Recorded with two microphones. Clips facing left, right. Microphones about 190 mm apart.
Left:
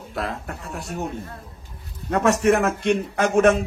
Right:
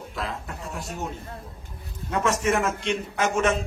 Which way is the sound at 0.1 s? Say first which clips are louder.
Left 5 dB; 60° left (ahead or behind).